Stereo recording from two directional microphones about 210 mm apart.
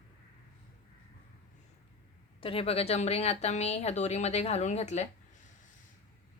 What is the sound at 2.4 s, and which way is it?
Speech, 25° left (ahead or behind).